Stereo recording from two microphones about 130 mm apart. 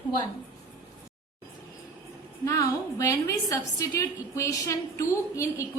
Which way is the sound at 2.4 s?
25° left (ahead or behind).